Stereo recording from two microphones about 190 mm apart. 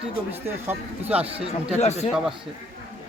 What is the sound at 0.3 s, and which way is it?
Speech, 10° right (ahead or behind).